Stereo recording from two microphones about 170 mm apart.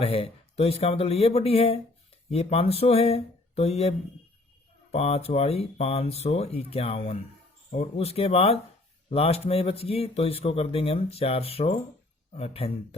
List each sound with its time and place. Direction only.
0.0 s speech: 35° left (ahead or behind)